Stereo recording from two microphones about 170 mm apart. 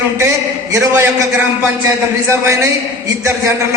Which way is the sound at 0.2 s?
15° right (ahead or behind).